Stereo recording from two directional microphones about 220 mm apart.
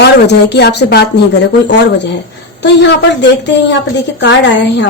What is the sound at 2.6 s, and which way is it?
A woman's voice, 50° left (ahead or behind).